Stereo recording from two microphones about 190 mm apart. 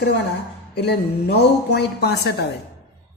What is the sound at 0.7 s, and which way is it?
A man's voice, 60° left (ahead or behind).